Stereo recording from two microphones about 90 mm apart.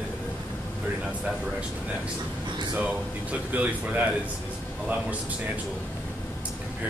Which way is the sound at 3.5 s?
20° right (ahead or behind).